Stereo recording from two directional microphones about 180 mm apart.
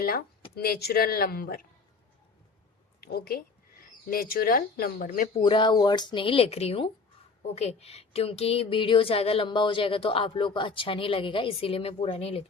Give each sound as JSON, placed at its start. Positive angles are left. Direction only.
{"t": 0.0, "sound": "speech", "side_deg": 55}
{"t": 3.0, "sound": "a woman's voice", "side_deg": 60}
{"t": 5.4, "sound": "speech", "side_deg": 25}